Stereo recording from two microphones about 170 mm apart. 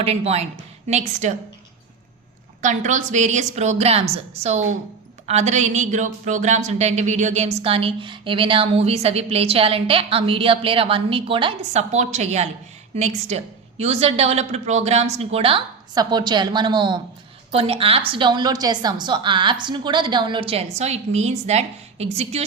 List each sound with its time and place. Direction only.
0.0 s a woman's voice: 35° right (ahead or behind)
2.6 s a woman's voice: 45° right (ahead or behind)